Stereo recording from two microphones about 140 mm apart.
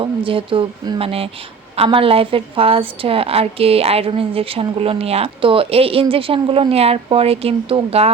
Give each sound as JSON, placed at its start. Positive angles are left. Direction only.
{"t": 0.0, "sound": "a woman's voice", "side_deg": -40}